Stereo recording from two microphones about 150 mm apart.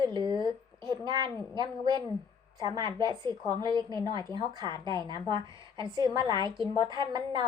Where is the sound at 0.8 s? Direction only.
25° right (ahead or behind).